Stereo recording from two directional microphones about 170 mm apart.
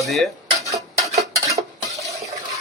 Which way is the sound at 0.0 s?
Centre (ahead or behind).